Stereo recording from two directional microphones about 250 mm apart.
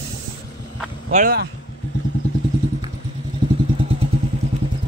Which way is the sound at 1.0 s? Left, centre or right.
Right.